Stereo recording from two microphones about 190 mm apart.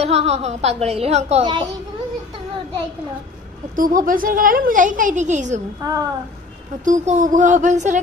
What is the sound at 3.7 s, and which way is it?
A woman's voice, 45° right (ahead or behind).